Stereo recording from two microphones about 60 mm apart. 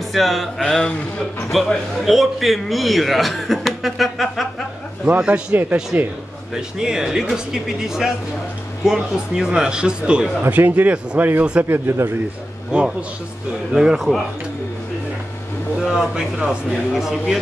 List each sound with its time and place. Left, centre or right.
0.1 s a man's voice: centre
5.0 s speech: centre
6.5 s speech: centre
10.7 s speech: right
11.6 s speech: right
12.7 s speech: centre
13.7 s a man's voice: centre
15.8 s speech: centre